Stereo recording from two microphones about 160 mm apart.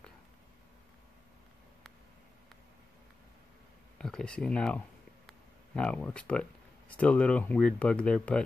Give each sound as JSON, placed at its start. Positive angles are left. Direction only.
{"t": 4.0, "sound": "speech", "side_deg": 5}